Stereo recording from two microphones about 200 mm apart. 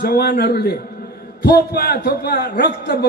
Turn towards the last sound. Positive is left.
turn(degrees=50)  # may be behind; listen again after turning